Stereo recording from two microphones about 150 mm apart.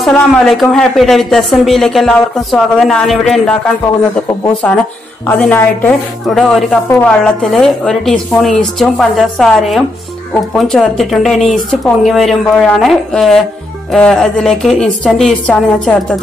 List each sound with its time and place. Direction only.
0.0 s speech: centre (ahead or behind)
4.6 s speech: 10° left (ahead or behind)